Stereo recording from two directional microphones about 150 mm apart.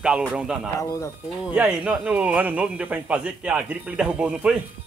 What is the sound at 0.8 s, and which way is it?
Speech, 20° left (ahead or behind).